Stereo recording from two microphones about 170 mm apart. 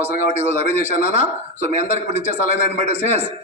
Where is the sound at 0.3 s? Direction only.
40° right (ahead or behind).